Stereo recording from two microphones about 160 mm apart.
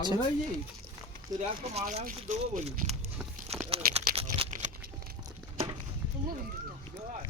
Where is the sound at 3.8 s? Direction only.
65° right (ahead or behind).